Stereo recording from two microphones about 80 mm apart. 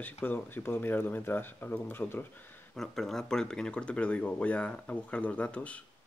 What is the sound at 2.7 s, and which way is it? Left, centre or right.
Speech, centre.